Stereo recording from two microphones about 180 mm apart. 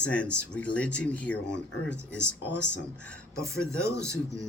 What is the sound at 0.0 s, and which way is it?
Speech, 5° left (ahead or behind).